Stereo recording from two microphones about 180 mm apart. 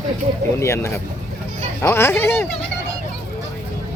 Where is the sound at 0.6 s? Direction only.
15° left (ahead or behind).